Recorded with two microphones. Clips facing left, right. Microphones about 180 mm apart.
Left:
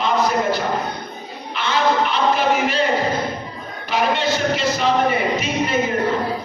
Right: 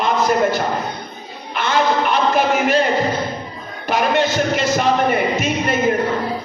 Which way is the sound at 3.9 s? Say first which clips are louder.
Right 2 dB; 50° right (ahead or behind).